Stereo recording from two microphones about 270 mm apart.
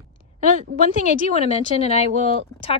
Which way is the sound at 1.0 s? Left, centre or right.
Left.